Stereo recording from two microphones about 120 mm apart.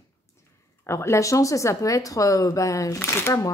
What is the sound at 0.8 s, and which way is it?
Speech, 25° left (ahead or behind).